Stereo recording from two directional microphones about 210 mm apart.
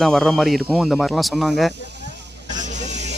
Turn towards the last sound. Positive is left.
turn(degrees=-35)  # may be behind; listen again after turning